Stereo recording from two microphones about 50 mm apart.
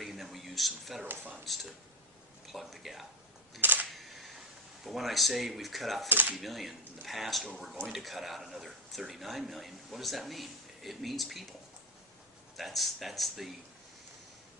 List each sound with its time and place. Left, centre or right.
0.0 s a sound: centre
1.0 s speech: right
2.5 s speech: centre
3.6 s speech: right
3.9 s camera: centre
4.8 s speech: centre
6.1 s speech: right
6.3 s speech: centre
12.5 s speech: centre